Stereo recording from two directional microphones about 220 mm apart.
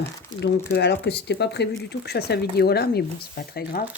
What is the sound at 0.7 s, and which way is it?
Speech, 50° left (ahead or behind).